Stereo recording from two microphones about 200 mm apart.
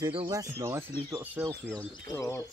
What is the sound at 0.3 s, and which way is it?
Speech, 15° right (ahead or behind).